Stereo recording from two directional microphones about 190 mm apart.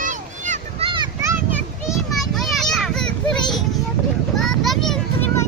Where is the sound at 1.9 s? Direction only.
Centre (ahead or behind).